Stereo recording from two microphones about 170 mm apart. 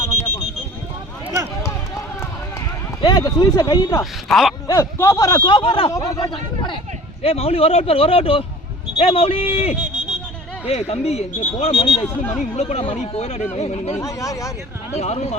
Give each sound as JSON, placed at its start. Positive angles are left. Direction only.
{"t": 3.0, "sound": "speech", "side_deg": 25}
{"t": 4.3, "sound": "a sound", "side_deg": 0}
{"t": 4.7, "sound": "speech", "side_deg": 15}
{"t": 5.9, "sound": "speech", "side_deg": 20}
{"t": 14.0, "sound": "speech", "side_deg": 20}
{"t": 14.9, "sound": "speech", "side_deg": 40}